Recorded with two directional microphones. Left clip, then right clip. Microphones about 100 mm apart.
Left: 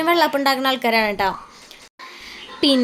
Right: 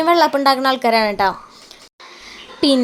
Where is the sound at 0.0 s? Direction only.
20° right (ahead or behind).